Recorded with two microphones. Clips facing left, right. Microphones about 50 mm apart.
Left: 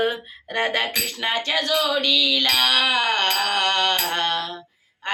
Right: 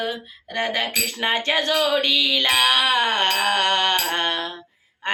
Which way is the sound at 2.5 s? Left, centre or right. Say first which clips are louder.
Right 3 dB; right.